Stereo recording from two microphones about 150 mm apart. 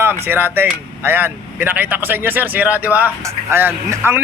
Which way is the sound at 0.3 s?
15° right (ahead or behind).